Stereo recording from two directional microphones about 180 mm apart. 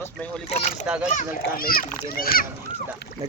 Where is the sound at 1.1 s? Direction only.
55° left (ahead or behind).